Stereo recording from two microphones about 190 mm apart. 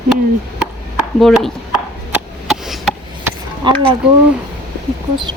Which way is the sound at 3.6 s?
25° right (ahead or behind).